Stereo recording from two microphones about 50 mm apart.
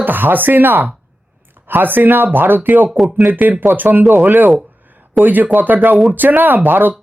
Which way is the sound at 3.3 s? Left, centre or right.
Right.